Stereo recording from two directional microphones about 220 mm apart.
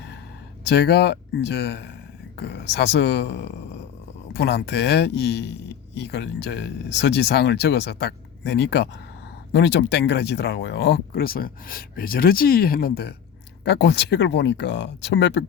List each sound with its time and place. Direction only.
0.6 s speech: 50° left (ahead or behind)